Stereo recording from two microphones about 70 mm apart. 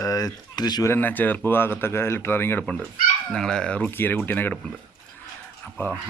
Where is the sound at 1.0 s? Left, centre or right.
Left.